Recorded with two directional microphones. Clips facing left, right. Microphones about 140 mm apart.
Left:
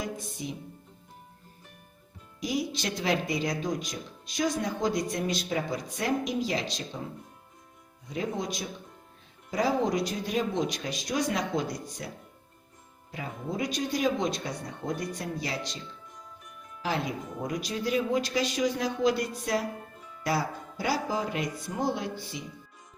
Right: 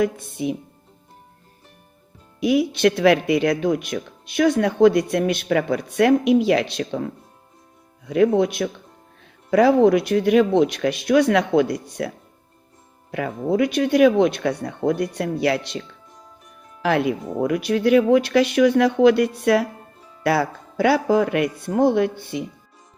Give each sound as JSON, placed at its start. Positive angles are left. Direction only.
{"t": 0.0, "sound": "speech", "side_deg": -60}
{"t": 2.4, "sound": "speech", "side_deg": -65}
{"t": 16.1, "sound": "music", "side_deg": -35}
{"t": 16.8, "sound": "speech", "side_deg": -65}
{"t": 20.0, "sound": "music", "side_deg": -30}
{"t": 20.2, "sound": "speech", "side_deg": -65}